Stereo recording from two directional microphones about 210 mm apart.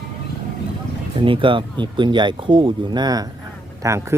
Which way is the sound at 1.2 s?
25° right (ahead or behind).